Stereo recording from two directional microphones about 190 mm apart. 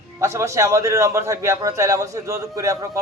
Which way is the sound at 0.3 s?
15° right (ahead or behind).